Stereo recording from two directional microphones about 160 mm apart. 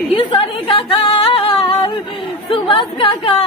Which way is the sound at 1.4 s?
30° left (ahead or behind).